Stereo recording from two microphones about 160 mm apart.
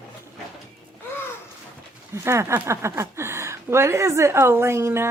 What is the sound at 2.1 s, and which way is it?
Speech, 15° right (ahead or behind).